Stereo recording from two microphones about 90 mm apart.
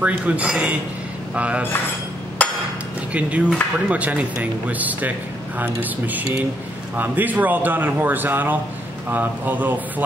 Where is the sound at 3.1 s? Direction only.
15° right (ahead or behind).